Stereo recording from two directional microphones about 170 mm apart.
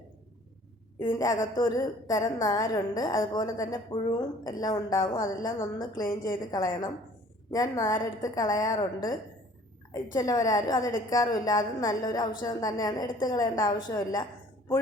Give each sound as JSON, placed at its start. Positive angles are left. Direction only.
{"t": 0.9, "sound": "a woman's voice", "side_deg": 15}
{"t": 10.2, "sound": "a woman's voice", "side_deg": 20}